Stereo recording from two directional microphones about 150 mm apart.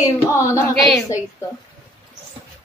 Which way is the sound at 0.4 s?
20° left (ahead or behind).